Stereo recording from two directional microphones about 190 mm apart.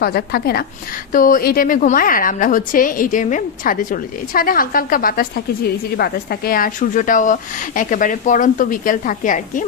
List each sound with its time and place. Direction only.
0.0 s a woman's voice: 55° left (ahead or behind)